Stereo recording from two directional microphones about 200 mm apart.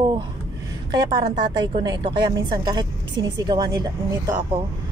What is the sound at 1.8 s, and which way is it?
A woman's voice, 20° right (ahead or behind).